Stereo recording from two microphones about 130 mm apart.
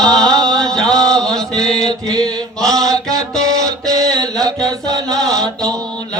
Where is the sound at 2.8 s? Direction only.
25° right (ahead or behind).